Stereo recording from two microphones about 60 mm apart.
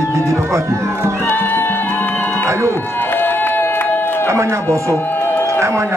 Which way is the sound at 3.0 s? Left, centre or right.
Left.